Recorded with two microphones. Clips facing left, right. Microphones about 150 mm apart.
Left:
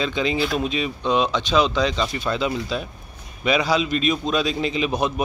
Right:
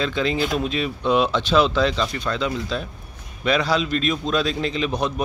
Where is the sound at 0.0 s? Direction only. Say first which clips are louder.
Even; centre (ahead or behind).